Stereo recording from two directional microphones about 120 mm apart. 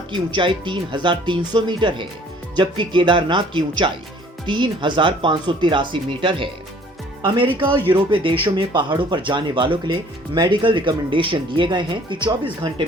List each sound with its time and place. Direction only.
0.1 s speech: 40° right (ahead or behind)